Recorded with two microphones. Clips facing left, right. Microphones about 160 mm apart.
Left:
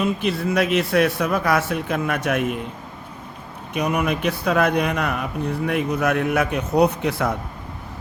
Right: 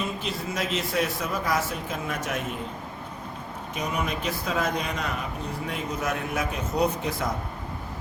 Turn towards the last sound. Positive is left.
turn(degrees=70)  # may be behind; listen again after turning